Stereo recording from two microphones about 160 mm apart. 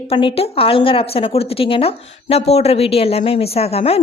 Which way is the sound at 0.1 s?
30° left (ahead or behind).